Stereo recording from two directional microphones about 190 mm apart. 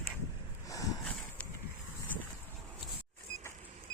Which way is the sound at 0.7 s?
20° left (ahead or behind).